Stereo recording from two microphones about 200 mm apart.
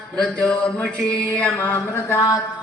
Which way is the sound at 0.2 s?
5° left (ahead or behind).